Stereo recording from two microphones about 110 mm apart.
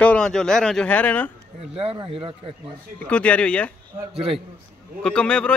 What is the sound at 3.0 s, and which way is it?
Speech, 10° left (ahead or behind).